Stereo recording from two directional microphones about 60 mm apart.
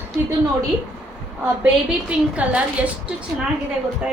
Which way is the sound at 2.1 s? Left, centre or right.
Right.